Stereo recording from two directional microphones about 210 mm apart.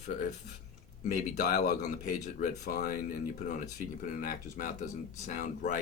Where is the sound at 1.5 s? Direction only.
50° left (ahead or behind).